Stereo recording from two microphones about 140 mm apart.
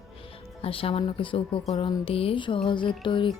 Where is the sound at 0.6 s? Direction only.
40° left (ahead or behind).